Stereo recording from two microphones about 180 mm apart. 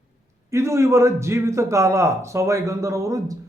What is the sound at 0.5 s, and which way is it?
A man's voice, 15° right (ahead or behind).